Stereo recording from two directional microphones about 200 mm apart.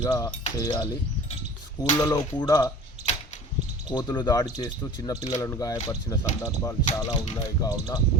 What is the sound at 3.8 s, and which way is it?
Speech, 20° left (ahead or behind).